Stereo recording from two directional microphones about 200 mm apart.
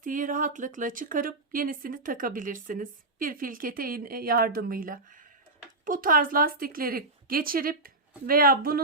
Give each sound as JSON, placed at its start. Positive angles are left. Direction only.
{"t": 0.0, "sound": "speech", "side_deg": -40}